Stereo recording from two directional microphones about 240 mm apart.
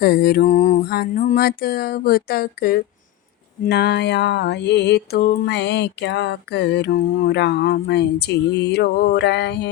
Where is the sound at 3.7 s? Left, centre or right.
Left.